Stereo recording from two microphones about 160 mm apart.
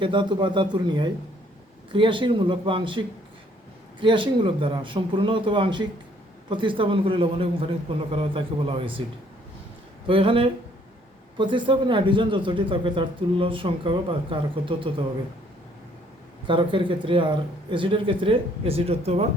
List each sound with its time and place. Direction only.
0.0 s a man's voice: 30° right (ahead or behind)
4.0 s a man's voice: 30° right (ahead or behind)
10.1 s a man's voice: 35° right (ahead or behind)
16.5 s a man's voice: 30° right (ahead or behind)